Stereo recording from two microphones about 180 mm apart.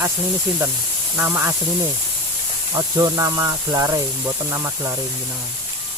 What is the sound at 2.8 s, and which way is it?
Speech, 20° right (ahead or behind).